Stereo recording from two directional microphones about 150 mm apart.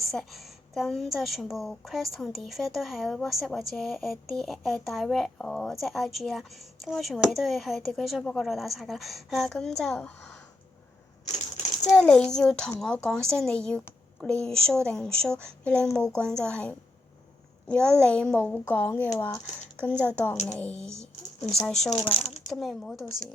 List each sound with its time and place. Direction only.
0.1 s speech: centre (ahead or behind)
11.9 s speech: 5° left (ahead or behind)
21.9 s speech: 35° left (ahead or behind)
22.2 s ratchet: 45° left (ahead or behind)
22.5 s speech: centre (ahead or behind)